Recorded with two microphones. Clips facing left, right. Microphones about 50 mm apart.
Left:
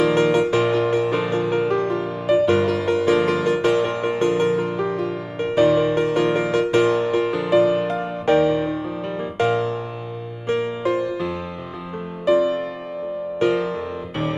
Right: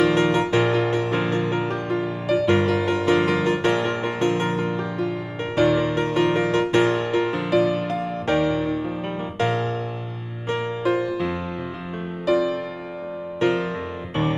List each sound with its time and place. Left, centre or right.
0.0 s music: right
1.7 s music: left
2.4 s music: right
4.7 s music: left
5.6 s music: right
7.4 s music: left
8.4 s music: right
10.5 s music: right
12.3 s music: left
13.4 s music: right